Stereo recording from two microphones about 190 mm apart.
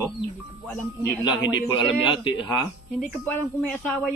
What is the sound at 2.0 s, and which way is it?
Speech, 25° left (ahead or behind).